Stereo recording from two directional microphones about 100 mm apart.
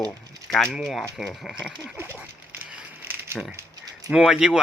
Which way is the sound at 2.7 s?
20° right (ahead or behind).